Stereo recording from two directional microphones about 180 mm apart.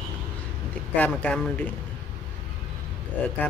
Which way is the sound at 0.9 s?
10° left (ahead or behind).